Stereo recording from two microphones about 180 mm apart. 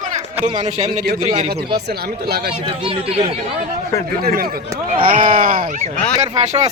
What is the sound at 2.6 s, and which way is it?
Speech, 30° right (ahead or behind).